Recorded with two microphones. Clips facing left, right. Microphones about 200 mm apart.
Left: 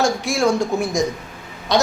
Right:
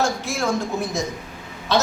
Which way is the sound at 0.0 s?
15° left (ahead or behind).